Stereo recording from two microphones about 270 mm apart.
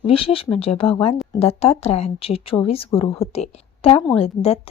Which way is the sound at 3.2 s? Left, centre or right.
Left.